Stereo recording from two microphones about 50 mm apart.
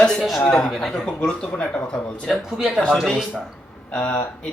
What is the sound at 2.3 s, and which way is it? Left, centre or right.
Speech, centre.